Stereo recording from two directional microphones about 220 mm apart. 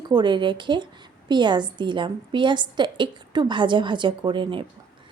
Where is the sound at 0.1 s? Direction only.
20° right (ahead or behind).